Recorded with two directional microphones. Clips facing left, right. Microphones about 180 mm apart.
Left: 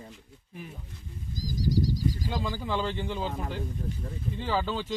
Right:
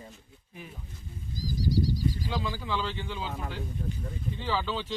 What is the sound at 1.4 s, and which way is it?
Speech, 45° left (ahead or behind).